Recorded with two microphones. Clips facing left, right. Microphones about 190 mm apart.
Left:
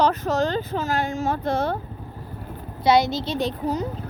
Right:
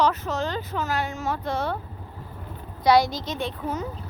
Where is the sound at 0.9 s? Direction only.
50° left (ahead or behind).